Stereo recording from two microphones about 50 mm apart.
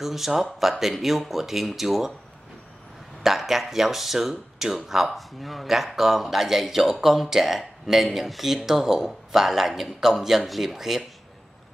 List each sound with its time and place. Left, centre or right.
0.0 s speech: centre
3.2 s speech: centre